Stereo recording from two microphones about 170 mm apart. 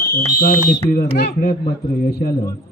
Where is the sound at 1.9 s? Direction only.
65° left (ahead or behind).